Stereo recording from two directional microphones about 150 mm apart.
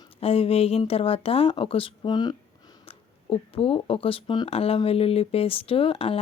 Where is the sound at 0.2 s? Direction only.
40° left (ahead or behind).